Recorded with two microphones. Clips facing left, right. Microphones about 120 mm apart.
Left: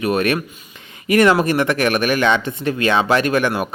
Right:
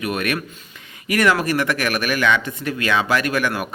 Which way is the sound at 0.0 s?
30° left (ahead or behind).